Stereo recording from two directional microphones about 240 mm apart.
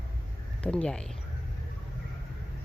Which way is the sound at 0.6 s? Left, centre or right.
Centre.